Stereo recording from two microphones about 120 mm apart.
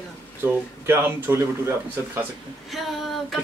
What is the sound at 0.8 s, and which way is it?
Speech, 20° right (ahead or behind).